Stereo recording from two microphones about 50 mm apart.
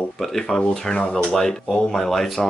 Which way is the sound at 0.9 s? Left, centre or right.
Left.